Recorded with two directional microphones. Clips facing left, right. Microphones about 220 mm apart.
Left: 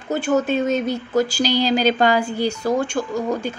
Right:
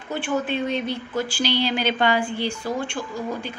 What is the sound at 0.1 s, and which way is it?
A woman's voice, 40° left (ahead or behind).